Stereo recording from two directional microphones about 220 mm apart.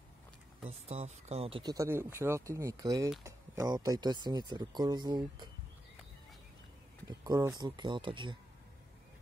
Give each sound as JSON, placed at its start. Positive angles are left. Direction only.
{"t": 0.7, "sound": "speech", "side_deg": -30}
{"t": 7.1, "sound": "speech", "side_deg": -15}